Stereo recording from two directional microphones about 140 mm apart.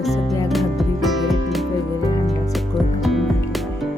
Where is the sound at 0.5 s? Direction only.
Centre (ahead or behind).